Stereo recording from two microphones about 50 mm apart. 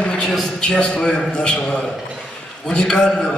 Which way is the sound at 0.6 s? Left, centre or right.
Centre.